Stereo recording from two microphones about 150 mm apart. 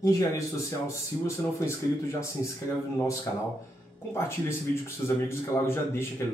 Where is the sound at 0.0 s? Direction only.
20° left (ahead or behind).